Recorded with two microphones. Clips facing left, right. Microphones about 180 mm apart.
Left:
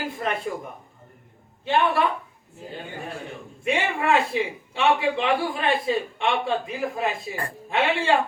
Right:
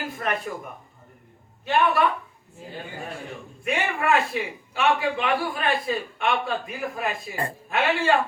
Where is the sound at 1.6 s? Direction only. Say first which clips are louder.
Even; 25° left (ahead or behind).